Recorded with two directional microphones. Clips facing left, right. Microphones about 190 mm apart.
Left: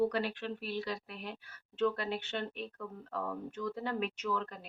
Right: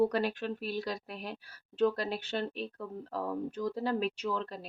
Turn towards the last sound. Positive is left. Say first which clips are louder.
# right 2 dB
turn(degrees=-35)  # may be behind; listen again after turning